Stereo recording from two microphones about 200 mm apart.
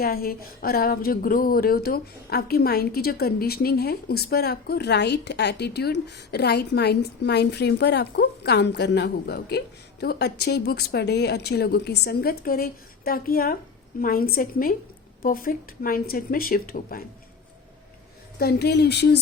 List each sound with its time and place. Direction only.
0.0 s speech: 50° left (ahead or behind)
18.3 s speech: 50° left (ahead or behind)